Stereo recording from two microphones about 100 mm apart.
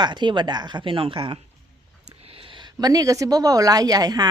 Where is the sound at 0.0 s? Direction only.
50° right (ahead or behind).